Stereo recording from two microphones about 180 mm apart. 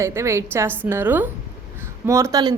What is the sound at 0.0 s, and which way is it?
A woman's voice, 15° right (ahead or behind).